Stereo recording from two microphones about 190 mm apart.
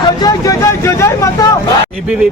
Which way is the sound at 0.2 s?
15° left (ahead or behind).